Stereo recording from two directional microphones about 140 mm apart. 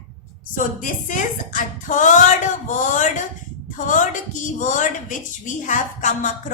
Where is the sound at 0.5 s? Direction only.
70° left (ahead or behind).